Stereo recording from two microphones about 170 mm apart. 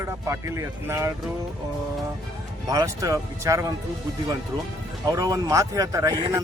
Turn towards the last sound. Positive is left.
turn(degrees=-20)  # may be behind; listen again after turning